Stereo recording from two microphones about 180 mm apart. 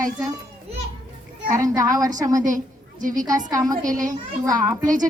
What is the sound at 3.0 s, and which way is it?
Speech, 45° right (ahead or behind).